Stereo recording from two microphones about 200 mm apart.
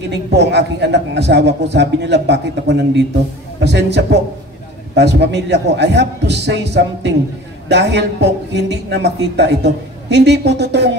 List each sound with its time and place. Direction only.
0.1 s a man's voice: 55° right (ahead or behind)